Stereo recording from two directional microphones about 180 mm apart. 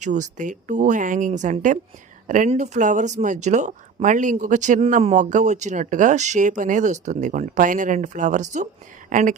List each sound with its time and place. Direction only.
0.0 s speech: 40° right (ahead or behind)